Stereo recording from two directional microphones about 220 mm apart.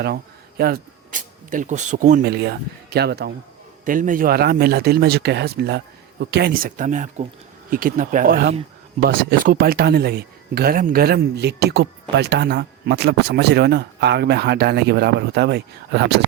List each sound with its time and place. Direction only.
0.0 s speech: 45° right (ahead or behind)